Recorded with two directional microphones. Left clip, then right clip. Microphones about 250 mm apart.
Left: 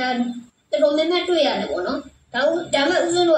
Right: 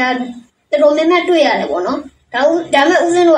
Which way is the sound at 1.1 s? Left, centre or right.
Right.